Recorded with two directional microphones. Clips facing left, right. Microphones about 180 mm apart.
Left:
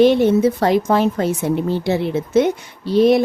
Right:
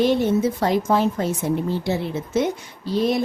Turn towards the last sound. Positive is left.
turn(degrees=65)  # may be behind; listen again after turning